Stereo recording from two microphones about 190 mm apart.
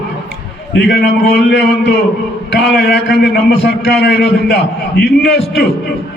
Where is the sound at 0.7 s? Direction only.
60° left (ahead or behind).